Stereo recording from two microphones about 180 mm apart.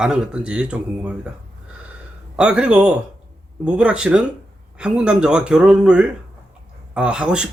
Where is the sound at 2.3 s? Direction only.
5° right (ahead or behind).